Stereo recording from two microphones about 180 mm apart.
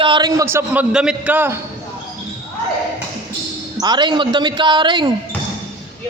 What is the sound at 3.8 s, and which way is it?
A woman's voice, 25° right (ahead or behind).